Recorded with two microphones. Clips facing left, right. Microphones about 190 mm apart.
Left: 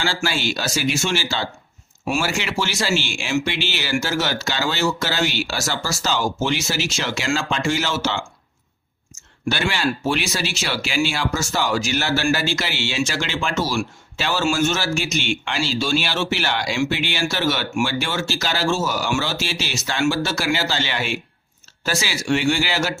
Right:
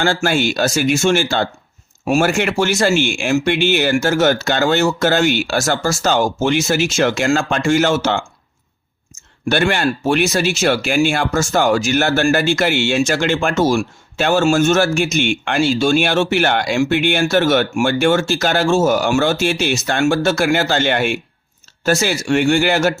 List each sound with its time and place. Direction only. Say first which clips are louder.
0.0 s speech: right 7 dB; 55° right (ahead or behind)
9.5 s speech: right 6 dB; 55° right (ahead or behind)